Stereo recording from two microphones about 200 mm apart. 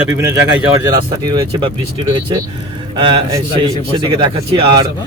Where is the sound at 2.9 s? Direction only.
25° right (ahead or behind).